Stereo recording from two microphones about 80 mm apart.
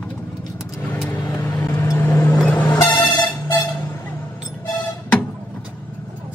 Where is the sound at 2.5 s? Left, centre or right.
Left.